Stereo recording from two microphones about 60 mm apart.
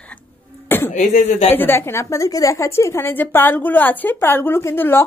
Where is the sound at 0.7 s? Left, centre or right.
Left.